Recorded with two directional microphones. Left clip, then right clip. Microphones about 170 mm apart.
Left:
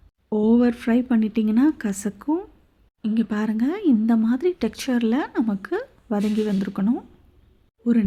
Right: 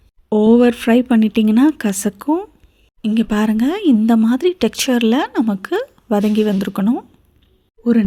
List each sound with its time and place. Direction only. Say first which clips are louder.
0.3 s speech: right 8 dB; 25° right (ahead or behind)